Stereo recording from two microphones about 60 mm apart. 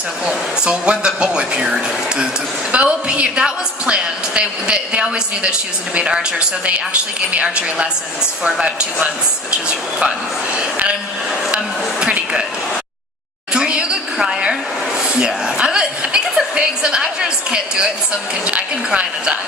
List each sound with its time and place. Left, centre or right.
0.3 s a woman's voice: centre
2.7 s a woman's voice: centre
7.3 s a woman's voice: centre
10.5 s a woman's voice: centre
13.5 s a sound: centre
15.5 s a woman's voice: centre